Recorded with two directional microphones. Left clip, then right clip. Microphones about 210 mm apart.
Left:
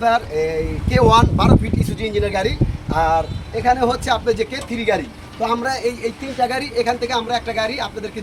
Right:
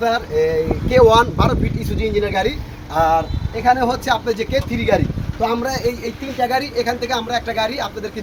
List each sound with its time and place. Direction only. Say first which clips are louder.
0.0 s speech: even; 20° left (ahead or behind)
2.4 s speech: right 1 dB; 20° left (ahead or behind)
3.1 s speech: right 1 dB; 10° left (ahead or behind)